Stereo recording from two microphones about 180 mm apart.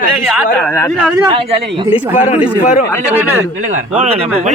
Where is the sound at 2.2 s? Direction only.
40° left (ahead or behind).